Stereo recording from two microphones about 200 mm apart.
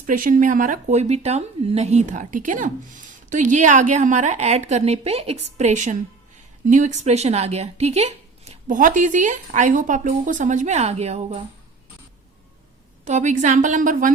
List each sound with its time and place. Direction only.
0.0 s speech: 40° right (ahead or behind)
13.1 s speech: 35° right (ahead or behind)